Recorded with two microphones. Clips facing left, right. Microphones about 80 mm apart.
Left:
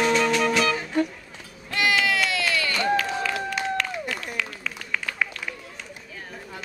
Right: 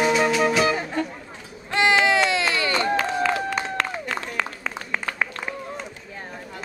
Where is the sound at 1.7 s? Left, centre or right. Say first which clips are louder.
Right 4 dB; right.